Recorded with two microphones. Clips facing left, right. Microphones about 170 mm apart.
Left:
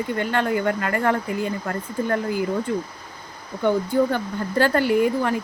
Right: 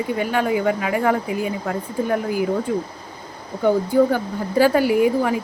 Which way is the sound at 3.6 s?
10° right (ahead or behind).